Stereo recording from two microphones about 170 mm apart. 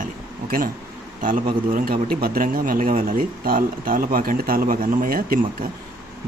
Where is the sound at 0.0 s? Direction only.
55° right (ahead or behind).